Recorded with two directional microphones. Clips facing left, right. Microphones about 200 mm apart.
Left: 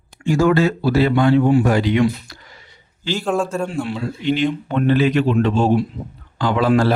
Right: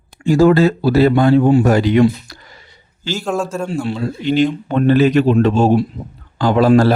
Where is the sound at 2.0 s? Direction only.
35° right (ahead or behind).